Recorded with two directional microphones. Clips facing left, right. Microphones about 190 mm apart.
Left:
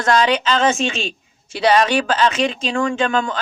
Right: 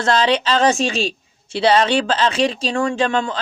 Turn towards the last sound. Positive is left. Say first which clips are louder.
# even
turn(degrees=-30)  # may be behind; listen again after turning